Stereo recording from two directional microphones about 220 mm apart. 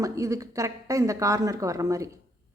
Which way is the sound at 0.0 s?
15° right (ahead or behind).